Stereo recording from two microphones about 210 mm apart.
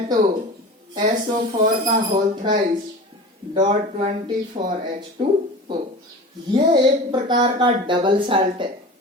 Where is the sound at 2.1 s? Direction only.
30° right (ahead or behind).